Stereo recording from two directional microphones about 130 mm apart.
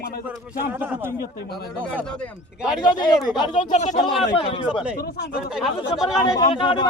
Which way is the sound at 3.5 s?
65° left (ahead or behind).